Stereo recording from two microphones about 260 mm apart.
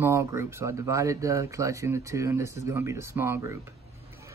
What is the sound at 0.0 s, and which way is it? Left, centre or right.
Speech, centre.